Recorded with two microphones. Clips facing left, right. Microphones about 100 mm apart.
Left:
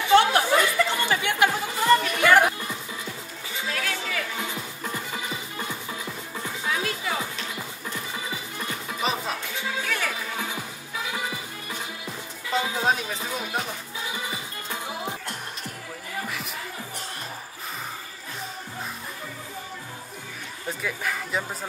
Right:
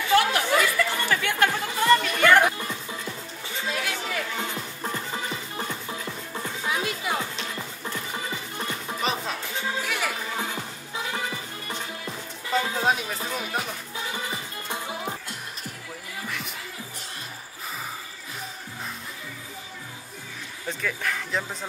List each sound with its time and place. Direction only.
0.1 s chatter: 25° left (ahead or behind); by 2.8 s 10° left (ahead or behind)
3.7 s a sound: 15° right (ahead or behind)
4.4 s music: 5° left (ahead or behind)
6.3 s music: 15° right (ahead or behind)
9.0 s music: centre (ahead or behind)
9.8 s music: 10° right (ahead or behind)
12.5 s music: centre (ahead or behind)
20.8 s music: 5° left (ahead or behind)